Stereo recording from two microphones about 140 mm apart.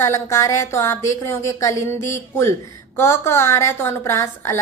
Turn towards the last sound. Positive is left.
turn(degrees=20)  # may be behind; listen again after turning